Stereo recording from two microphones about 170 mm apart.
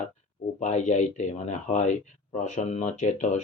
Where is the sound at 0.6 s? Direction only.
40° left (ahead or behind).